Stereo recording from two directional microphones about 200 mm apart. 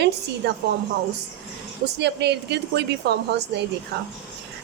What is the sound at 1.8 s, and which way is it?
A woman's voice, 55° right (ahead or behind).